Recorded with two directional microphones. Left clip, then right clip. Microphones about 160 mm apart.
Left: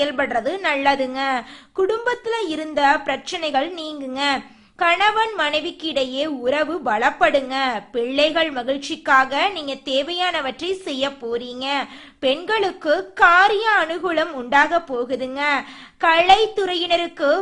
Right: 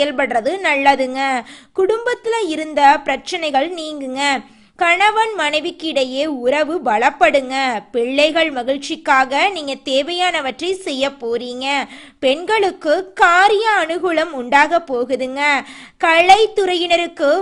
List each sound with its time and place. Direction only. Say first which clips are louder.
0.0 s a woman's voice: right 4 dB; 30° right (ahead or behind)